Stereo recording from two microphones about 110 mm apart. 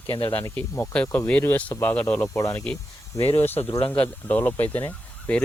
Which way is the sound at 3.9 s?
15° left (ahead or behind).